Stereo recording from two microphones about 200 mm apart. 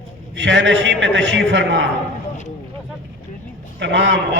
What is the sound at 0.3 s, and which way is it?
A man's voice, 65° right (ahead or behind).